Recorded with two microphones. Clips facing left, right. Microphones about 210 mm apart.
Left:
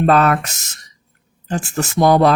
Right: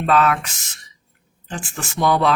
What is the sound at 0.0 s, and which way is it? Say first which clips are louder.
Speech: left 4 dB; 45° left (ahead or behind).